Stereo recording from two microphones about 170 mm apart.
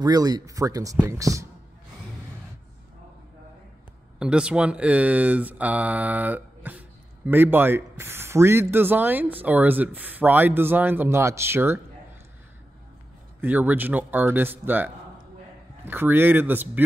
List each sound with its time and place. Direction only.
0.0 s speech: 25° right (ahead or behind)
4.2 s speech: 5° right (ahead or behind)
13.4 s speech: 10° right (ahead or behind)